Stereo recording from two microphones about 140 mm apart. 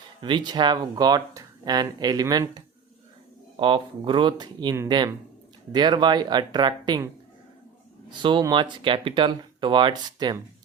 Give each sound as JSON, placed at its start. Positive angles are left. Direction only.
{"t": 0.2, "sound": "speech", "side_deg": -35}
{"t": 3.6, "sound": "speech", "side_deg": -35}
{"t": 8.2, "sound": "speech", "side_deg": -35}